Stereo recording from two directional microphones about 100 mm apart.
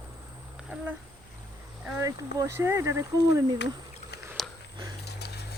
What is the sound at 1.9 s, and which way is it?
Speech, 30° right (ahead or behind).